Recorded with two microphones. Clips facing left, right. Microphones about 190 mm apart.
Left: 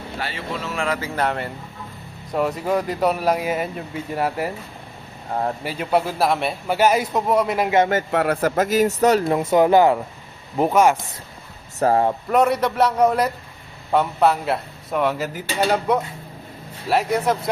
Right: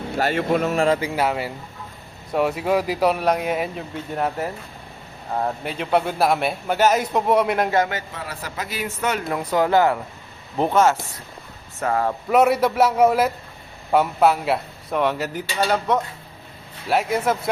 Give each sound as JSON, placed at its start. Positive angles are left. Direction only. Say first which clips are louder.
{"t": 0.2, "sound": "speech", "louder": "right 10 dB", "side_deg": -50}
{"t": 0.9, "sound": "speech", "louder": "right 1 dB", "side_deg": -10}
{"t": 5.6, "sound": "speech", "louder": "even", "side_deg": 5}
{"t": 6.7, "sound": "speech", "louder": "left 1 dB", "side_deg": 10}
{"t": 7.1, "sound": "speech", "louder": "right 1 dB", "side_deg": 0}
{"t": 8.1, "sound": "speech", "louder": "left 13 dB", "side_deg": 60}
{"t": 9.3, "sound": "speech", "louder": "left 4 dB", "side_deg": 25}
{"t": 11.8, "sound": "speech", "louder": "left 4 dB", "side_deg": 30}
{"t": 12.3, "sound": "speech", "louder": "right 3 dB", "side_deg": -5}